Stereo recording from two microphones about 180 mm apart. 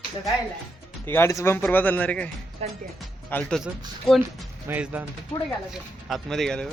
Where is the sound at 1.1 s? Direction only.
15° left (ahead or behind).